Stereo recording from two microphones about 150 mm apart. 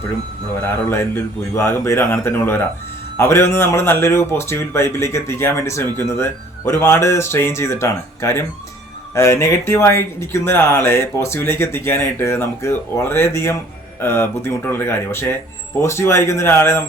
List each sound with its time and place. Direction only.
0.9 s a man's voice: 15° left (ahead or behind)